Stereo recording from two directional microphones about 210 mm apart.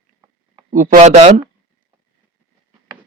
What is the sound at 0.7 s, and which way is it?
Speech, 40° right (ahead or behind).